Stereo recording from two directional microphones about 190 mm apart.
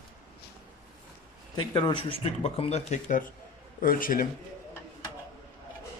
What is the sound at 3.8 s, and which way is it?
Speech, 50° left (ahead or behind).